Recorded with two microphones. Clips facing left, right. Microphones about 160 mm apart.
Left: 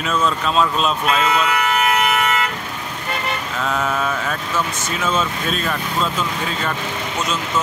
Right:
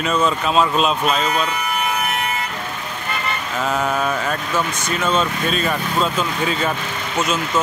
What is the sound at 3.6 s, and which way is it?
Speech, centre (ahead or behind).